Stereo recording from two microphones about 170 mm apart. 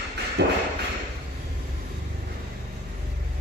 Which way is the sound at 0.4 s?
90° right.